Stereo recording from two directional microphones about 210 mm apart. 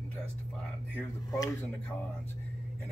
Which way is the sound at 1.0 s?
15° left (ahead or behind).